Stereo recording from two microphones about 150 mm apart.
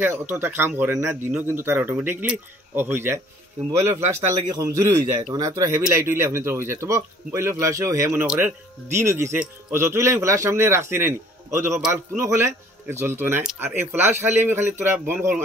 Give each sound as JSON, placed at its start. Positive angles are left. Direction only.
{"t": 0.0, "sound": "a man's voice", "side_deg": -15}